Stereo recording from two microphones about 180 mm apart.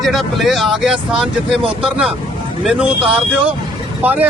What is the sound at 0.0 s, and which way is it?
Speech, centre (ahead or behind).